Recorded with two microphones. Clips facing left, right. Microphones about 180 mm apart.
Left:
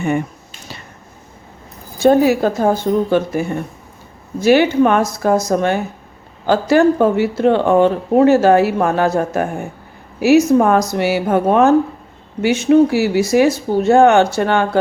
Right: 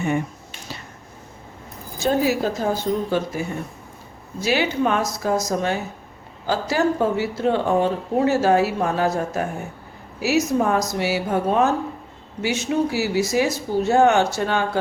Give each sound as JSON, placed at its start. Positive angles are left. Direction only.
{"t": 2.0, "sound": "speech", "side_deg": 60}